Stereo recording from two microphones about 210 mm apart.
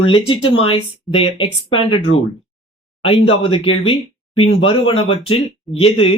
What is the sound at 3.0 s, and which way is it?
Speech, 25° left (ahead or behind).